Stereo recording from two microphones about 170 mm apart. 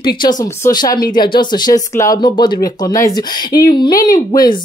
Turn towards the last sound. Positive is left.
turn(degrees=20)  # may be behind; listen again after turning